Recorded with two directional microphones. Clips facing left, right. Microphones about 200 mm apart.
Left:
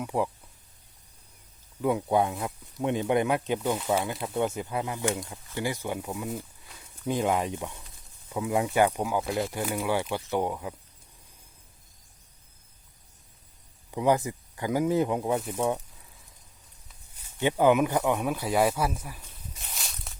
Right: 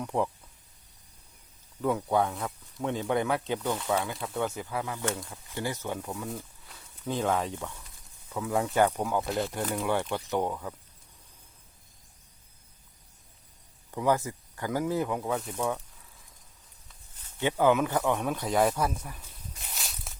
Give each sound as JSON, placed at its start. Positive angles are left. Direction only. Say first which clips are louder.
{"t": 0.0, "sound": "speech", "louder": "left 1 dB", "side_deg": 5}
{"t": 1.8, "sound": "speech", "louder": "left 2 dB", "side_deg": 15}
{"t": 13.9, "sound": "speech", "louder": "left 2 dB", "side_deg": 15}
{"t": 15.4, "sound": "speech", "louder": "left 3 dB", "side_deg": 5}
{"t": 17.4, "sound": "speech", "louder": "left 2 dB", "side_deg": 15}